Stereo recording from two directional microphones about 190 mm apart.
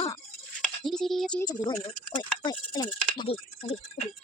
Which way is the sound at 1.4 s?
20° left (ahead or behind).